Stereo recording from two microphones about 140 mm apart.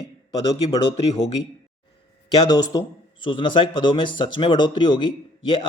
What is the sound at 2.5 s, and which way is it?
A man's voice, 30° left (ahead or behind).